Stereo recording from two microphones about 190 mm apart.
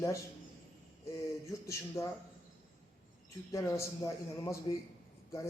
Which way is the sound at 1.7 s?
15° left (ahead or behind).